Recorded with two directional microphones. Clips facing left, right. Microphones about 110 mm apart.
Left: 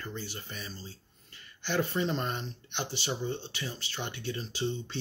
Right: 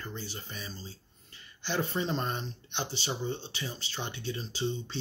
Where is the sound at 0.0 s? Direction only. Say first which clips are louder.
Left 1 dB; 30° right (ahead or behind).